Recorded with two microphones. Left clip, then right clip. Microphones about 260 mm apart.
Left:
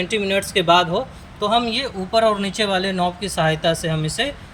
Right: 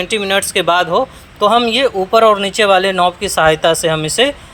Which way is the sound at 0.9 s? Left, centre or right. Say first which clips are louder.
Right 9 dB; right.